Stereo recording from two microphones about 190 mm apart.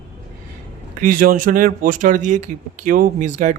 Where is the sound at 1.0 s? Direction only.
50° right (ahead or behind).